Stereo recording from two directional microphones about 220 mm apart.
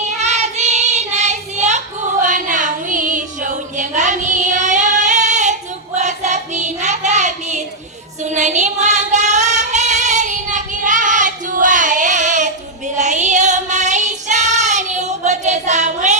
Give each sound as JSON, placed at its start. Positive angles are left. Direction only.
{"t": 0.2, "sound": "child singing", "side_deg": -30}
{"t": 8.2, "sound": "female singing", "side_deg": -30}
{"t": 13.0, "sound": "child singing", "side_deg": -30}